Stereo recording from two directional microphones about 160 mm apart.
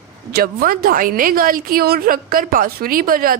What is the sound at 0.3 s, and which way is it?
A woman's voice, 65° right (ahead or behind).